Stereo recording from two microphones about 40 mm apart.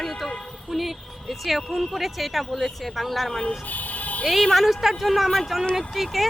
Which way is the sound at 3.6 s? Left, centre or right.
Left.